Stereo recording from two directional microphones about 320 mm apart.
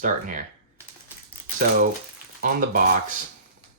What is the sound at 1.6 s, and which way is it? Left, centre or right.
Speech, right.